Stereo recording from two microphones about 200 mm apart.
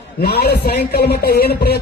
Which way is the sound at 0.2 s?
55° left (ahead or behind).